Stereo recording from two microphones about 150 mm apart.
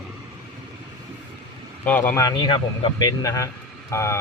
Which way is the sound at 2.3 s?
30° left (ahead or behind).